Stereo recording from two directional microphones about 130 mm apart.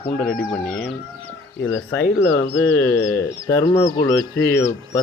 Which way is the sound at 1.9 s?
15° left (ahead or behind).